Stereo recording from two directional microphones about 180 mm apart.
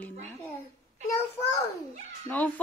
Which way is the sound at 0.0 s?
10° left (ahead or behind).